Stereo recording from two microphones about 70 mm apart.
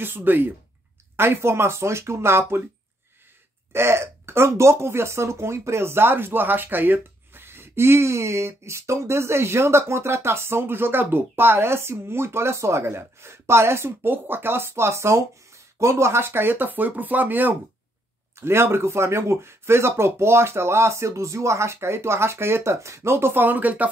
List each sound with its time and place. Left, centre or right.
0.0 s speech: right
3.7 s speech: right
18.4 s speech: right